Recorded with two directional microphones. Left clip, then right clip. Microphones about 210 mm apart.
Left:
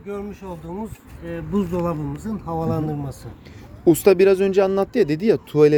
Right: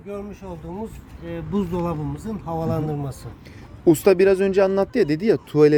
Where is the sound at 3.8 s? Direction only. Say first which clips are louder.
Left 1 dB; centre (ahead or behind).